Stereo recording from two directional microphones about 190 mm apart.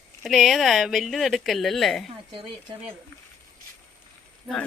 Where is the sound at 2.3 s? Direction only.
25° right (ahead or behind).